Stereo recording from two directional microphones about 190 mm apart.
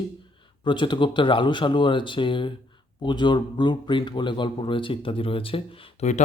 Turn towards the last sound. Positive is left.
turn(degrees=35)  # may be behind; listen again after turning